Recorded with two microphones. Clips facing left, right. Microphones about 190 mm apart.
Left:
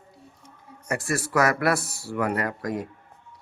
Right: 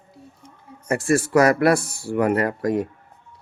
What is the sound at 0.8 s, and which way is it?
Speech, 25° right (ahead or behind).